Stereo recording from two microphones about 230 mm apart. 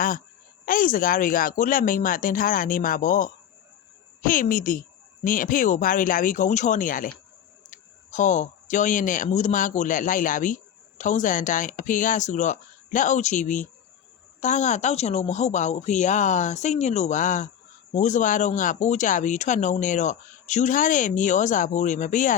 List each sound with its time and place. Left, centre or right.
0.6 s speech: left